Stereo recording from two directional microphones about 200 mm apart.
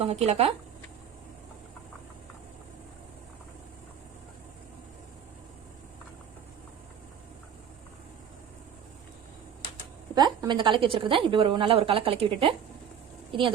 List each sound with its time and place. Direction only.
0.0 s speech: 30° right (ahead or behind)
10.2 s a woman's voice: 20° right (ahead or behind)